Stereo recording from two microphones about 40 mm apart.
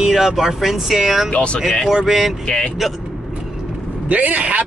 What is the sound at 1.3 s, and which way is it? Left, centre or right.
Speech, left.